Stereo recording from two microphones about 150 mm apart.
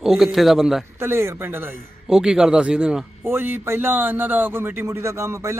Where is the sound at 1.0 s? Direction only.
15° right (ahead or behind).